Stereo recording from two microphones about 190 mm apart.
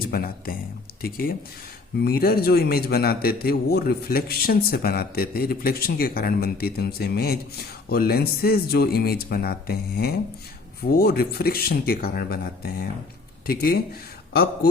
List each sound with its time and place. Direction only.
0.1 s a man's voice: 50° left (ahead or behind)